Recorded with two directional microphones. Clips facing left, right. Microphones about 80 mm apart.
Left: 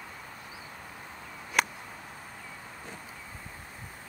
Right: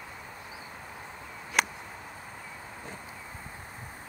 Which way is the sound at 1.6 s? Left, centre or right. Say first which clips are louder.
Even; centre.